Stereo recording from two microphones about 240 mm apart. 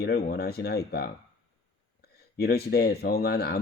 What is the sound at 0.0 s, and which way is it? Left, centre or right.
Speech, left.